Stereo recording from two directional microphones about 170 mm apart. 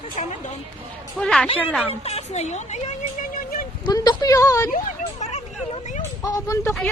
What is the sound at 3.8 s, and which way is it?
Speech, 25° left (ahead or behind).